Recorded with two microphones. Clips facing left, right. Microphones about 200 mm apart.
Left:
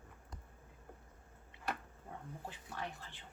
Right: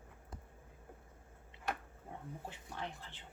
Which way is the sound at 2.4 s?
20° right (ahead or behind).